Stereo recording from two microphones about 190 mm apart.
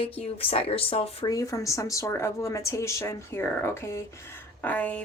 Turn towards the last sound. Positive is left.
turn(degrees=10)  # may be behind; listen again after turning